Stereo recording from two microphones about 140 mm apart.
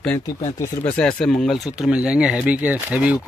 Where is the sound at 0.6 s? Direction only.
10° left (ahead or behind).